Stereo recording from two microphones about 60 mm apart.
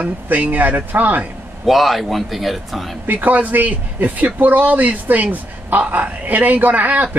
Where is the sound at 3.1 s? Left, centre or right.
Right.